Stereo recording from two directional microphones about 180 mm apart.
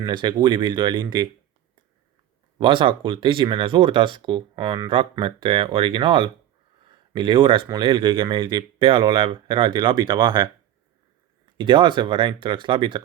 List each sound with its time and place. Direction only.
0.0 s speech: 25° right (ahead or behind)
2.6 s speech: 30° right (ahead or behind)
11.5 s speech: 25° right (ahead or behind)